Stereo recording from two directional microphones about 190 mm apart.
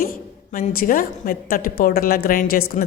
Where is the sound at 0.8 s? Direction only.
45° left (ahead or behind).